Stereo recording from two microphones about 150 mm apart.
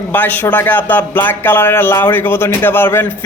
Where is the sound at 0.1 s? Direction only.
10° left (ahead or behind).